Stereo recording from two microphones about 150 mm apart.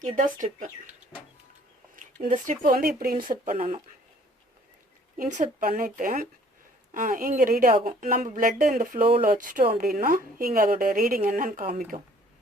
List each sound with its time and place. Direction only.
0.2 s speech: 55° right (ahead or behind)
2.2 s a woman's voice: 60° right (ahead or behind)
5.1 s speech: 65° right (ahead or behind)
9.0 s speech: 40° right (ahead or behind)
9.2 s a woman's voice: 65° right (ahead or behind)